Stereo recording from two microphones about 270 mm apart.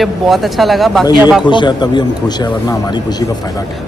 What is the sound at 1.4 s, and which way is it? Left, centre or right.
Speech, centre.